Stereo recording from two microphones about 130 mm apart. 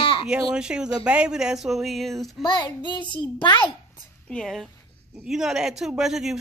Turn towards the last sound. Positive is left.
turn(degrees=-5)  # may be behind; listen again after turning